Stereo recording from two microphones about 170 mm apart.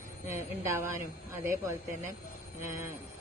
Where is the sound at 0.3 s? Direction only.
15° right (ahead or behind).